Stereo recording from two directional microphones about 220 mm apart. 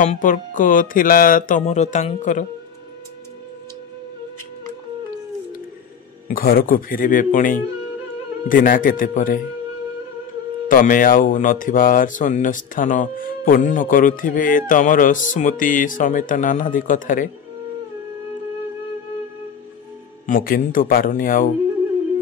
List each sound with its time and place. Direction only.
0.0 s speech: 35° left (ahead or behind)
6.2 s speech: 40° left (ahead or behind)
10.7 s speech: 40° left (ahead or behind)
20.2 s speech: 40° left (ahead or behind)